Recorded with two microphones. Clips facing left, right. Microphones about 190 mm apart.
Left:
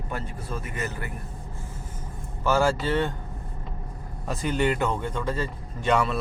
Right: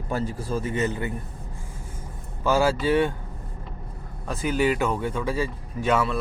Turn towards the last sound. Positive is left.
turn(degrees=0)  # may be behind; listen again after turning